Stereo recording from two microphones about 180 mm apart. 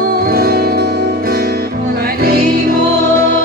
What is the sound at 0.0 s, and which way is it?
Music, 55° right (ahead or behind).